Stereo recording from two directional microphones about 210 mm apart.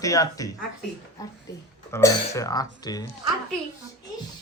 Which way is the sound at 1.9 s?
15° left (ahead or behind).